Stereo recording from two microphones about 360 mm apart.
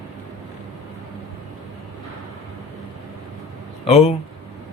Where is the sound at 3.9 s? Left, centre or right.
Centre.